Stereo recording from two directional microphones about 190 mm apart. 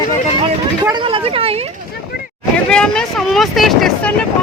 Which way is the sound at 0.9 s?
25° right (ahead or behind).